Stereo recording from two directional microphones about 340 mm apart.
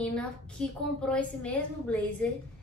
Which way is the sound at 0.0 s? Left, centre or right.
Centre.